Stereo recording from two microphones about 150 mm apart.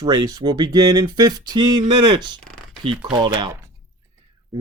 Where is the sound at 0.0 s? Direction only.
30° right (ahead or behind).